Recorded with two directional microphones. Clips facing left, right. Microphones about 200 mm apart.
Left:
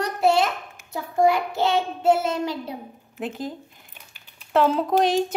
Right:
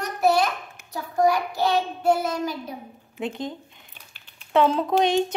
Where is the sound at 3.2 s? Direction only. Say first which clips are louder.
Even; 5° left (ahead or behind).